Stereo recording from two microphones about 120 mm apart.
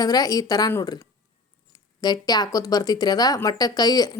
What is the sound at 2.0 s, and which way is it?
Speech, 35° left (ahead or behind).